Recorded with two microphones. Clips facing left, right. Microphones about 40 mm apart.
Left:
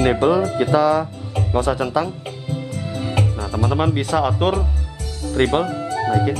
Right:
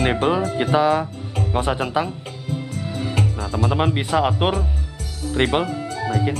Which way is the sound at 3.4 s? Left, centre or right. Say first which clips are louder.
Right 1 dB; centre.